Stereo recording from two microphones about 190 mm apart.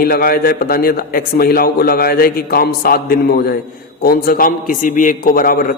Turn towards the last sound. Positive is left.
turn(degrees=50)  # may be behind; listen again after turning